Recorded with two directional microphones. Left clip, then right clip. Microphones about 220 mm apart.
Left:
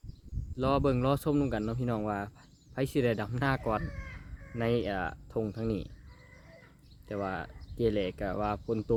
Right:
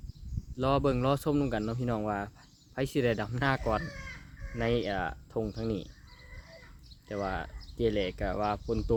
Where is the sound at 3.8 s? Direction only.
40° right (ahead or behind).